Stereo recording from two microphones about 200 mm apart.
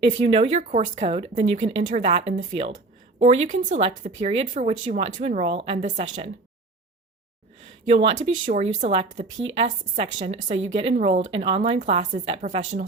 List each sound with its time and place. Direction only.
0.3 s speech: 30° right (ahead or behind)
7.9 s speech: 35° right (ahead or behind)